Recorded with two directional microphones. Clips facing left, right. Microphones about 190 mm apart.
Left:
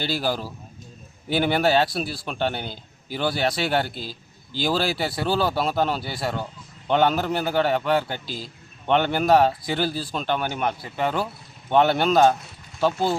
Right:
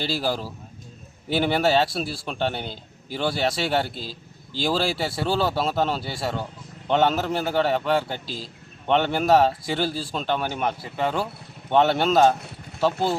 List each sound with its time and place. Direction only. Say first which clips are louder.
0.0 s a man's voice: even; centre (ahead or behind)
4.0 s a sound: even; 30° right (ahead or behind)
4.6 s a man's voice: even; centre (ahead or behind)